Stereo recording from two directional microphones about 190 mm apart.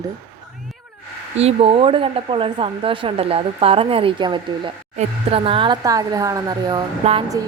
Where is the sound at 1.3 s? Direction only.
30° right (ahead or behind).